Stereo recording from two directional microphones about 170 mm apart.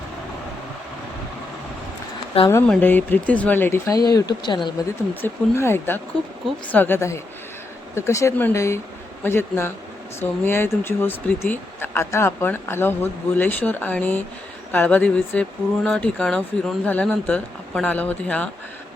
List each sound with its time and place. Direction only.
2.5 s speech: 15° left (ahead or behind)
5.2 s speech: 15° left (ahead or behind)